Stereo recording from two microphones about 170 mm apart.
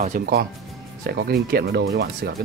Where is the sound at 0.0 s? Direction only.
50° right (ahead or behind).